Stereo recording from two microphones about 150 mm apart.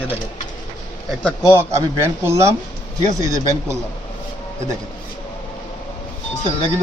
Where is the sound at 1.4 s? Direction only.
15° right (ahead or behind).